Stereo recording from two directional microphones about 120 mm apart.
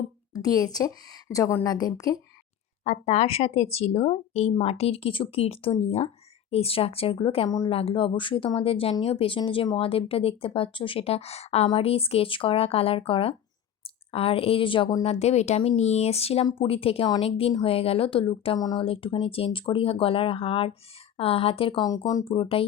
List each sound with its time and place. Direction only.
0.3 s a woman's voice: 30° left (ahead or behind)
2.8 s a woman's voice: 65° left (ahead or behind); by 18.6 s 50° left (ahead or behind)
18.6 s a woman's voice: 35° left (ahead or behind)
18.9 s speech: 50° left (ahead or behind)
21.8 s a woman's voice: 35° left (ahead or behind)
22.2 s speech: 45° left (ahead or behind)